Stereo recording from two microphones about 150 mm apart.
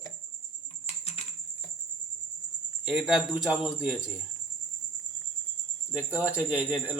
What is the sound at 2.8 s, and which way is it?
Speech, 5° right (ahead or behind).